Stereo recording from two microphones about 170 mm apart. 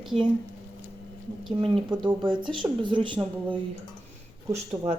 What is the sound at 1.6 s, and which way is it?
Speech, 30° right (ahead or behind).